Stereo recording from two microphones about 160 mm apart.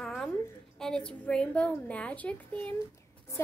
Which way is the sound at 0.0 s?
5° left (ahead or behind).